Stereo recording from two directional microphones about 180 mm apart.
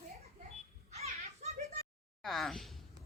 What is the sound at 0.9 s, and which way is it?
Children playing, 35° right (ahead or behind).